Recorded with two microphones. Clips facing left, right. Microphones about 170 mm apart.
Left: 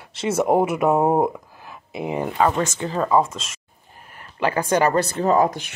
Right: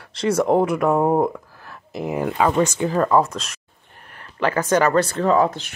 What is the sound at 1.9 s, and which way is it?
Speech, 5° left (ahead or behind).